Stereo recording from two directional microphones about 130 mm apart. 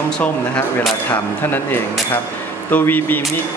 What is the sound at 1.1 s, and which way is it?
Speech, 15° left (ahead or behind).